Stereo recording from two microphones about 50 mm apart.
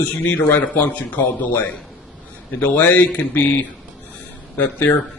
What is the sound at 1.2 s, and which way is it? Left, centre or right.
Speech, left.